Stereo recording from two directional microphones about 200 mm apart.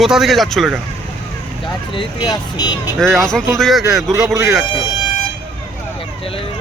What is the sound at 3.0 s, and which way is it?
A man's voice, centre (ahead or behind).